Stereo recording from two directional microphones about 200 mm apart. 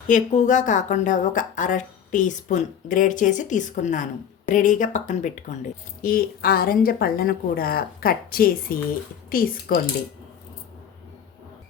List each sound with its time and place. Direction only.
0.1 s a woman's voice: 40° left (ahead or behind)